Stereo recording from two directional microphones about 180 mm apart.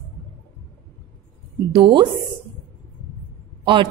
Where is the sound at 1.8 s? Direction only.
30° right (ahead or behind).